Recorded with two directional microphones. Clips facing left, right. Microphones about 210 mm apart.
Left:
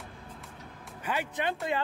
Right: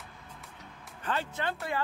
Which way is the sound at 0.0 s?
Centre (ahead or behind).